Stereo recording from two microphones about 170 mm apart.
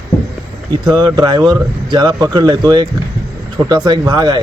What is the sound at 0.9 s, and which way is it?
Speech, 25° right (ahead or behind).